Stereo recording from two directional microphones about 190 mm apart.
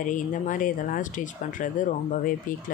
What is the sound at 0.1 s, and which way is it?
Speech, 45° left (ahead or behind).